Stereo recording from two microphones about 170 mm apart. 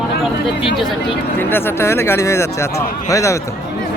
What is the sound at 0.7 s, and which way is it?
Speech, centre (ahead or behind).